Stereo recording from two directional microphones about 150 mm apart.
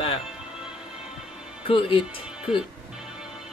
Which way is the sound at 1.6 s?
35° left (ahead or behind).